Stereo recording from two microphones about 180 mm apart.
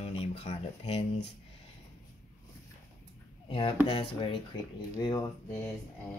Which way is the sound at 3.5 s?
30° left (ahead or behind).